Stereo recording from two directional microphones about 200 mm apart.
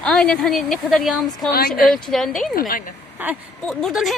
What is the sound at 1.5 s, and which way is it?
Speech, 50° left (ahead or behind).